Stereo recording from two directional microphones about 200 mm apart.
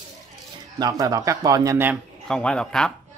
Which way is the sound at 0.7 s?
20° right (ahead or behind).